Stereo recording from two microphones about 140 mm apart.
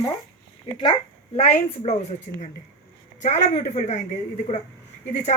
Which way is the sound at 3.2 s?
55° left (ahead or behind).